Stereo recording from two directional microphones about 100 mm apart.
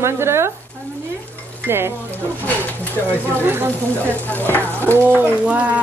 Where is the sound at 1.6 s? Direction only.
20° right (ahead or behind).